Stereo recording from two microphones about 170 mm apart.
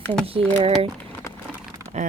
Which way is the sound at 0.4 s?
5° left (ahead or behind).